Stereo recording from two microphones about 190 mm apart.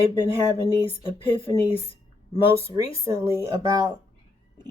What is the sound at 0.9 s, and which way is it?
Speech, 25° left (ahead or behind).